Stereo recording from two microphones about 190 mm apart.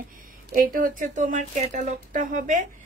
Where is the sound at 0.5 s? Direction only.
45° right (ahead or behind).